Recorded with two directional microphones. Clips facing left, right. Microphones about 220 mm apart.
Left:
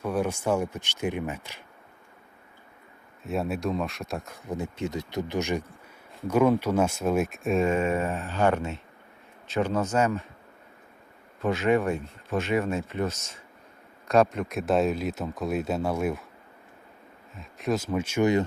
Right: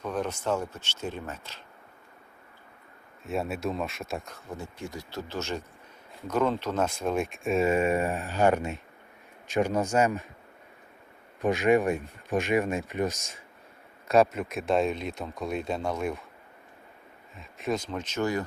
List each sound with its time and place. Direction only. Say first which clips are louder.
0.0 s speech: left 4 dB; 10° left (ahead or behind)
3.2 s speech: left 2 dB; centre (ahead or behind)
4.4 s speech: left 6 dB; 20° left (ahead or behind); by 10.2 s 10° right (ahead or behind)
11.4 s speech: right 1 dB; 15° right (ahead or behind); by 16.2 s 5° left (ahead or behind)
17.3 s speech: left 2 dB; centre (ahead or behind)